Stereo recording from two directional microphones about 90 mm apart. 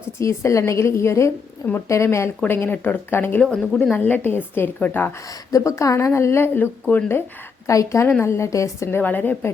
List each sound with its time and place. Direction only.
0.2 s a woman's voice: 35° left (ahead or behind)
3.4 s a woman's voice: 10° left (ahead or behind)
3.9 s a woman's voice: 20° left (ahead or behind)
5.3 s a woman's voice: 40° left (ahead or behind); by 7.3 s 25° left (ahead or behind)
7.7 s a woman's voice: 40° left (ahead or behind)
9.0 s a woman's voice: 20° left (ahead or behind)